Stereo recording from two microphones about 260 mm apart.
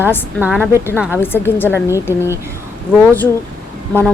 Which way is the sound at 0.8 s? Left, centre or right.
Centre.